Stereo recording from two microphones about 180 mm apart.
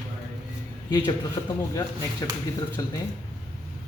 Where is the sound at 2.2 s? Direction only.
20° left (ahead or behind).